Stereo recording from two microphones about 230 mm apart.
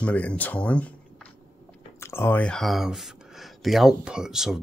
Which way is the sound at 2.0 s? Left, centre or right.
Centre.